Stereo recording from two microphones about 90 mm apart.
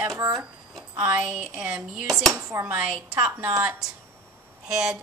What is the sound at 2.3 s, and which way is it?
Speech, 35° right (ahead or behind).